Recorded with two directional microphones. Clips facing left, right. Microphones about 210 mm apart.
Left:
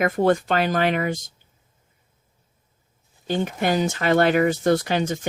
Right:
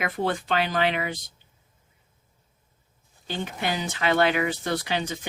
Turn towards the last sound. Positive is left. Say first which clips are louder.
# left 6 dB
turn(degrees=45)  # may be behind; listen again after turning